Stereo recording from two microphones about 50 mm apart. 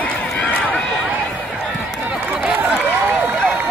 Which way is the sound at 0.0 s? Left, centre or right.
Left.